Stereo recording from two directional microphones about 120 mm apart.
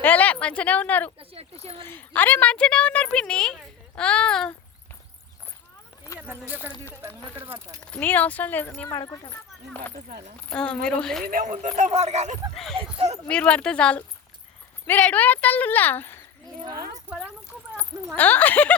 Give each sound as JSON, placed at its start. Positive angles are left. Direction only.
{"t": 0.0, "sound": "a woman's voice", "side_deg": 15}
{"t": 1.2, "sound": "speech", "side_deg": -55}
{"t": 1.8, "sound": "a woman's voice", "side_deg": 15}
{"t": 6.1, "sound": "speech", "side_deg": -15}
{"t": 7.8, "sound": "a woman's voice", "side_deg": 10}
{"t": 8.9, "sound": "speech", "side_deg": 35}
{"t": 10.5, "sound": "a woman's voice", "side_deg": 10}
{"t": 11.4, "sound": "speech", "side_deg": -90}
{"t": 12.5, "sound": "a woman's voice", "side_deg": 0}
{"t": 16.6, "sound": "speech", "side_deg": -25}
{"t": 18.2, "sound": "a woman's voice", "side_deg": 15}